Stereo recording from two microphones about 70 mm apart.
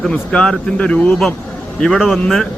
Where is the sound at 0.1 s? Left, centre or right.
Centre.